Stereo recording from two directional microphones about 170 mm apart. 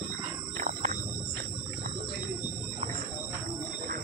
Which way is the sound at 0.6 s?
45° right (ahead or behind).